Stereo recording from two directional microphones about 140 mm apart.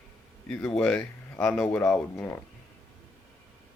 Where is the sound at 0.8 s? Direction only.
10° left (ahead or behind).